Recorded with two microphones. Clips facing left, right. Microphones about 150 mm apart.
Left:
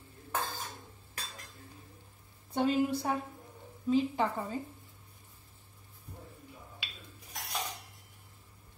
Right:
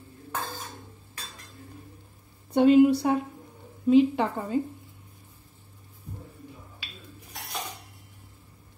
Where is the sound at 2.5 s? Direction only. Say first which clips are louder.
Right 11 dB; 70° right (ahead or behind).